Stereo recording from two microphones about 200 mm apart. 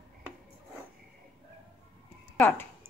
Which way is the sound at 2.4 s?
10° left (ahead or behind).